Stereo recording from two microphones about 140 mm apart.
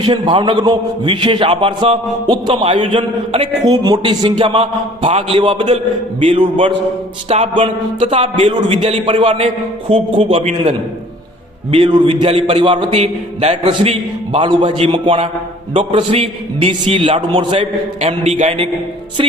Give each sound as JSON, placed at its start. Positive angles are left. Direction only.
{"t": 0.0, "sound": "a man's voice", "side_deg": -35}
{"t": 3.7, "sound": "a man's voice", "side_deg": -30}
{"t": 18.0, "sound": "a man's voice", "side_deg": -50}